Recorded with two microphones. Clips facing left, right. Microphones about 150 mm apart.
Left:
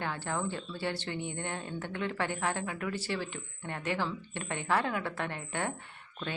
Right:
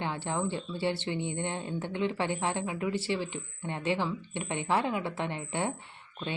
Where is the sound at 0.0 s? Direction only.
20° right (ahead or behind).